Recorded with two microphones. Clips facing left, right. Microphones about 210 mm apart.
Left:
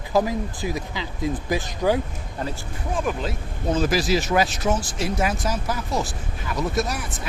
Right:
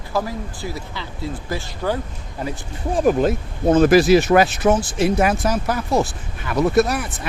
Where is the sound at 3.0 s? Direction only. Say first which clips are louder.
Right 10 dB; 45° right (ahead or behind).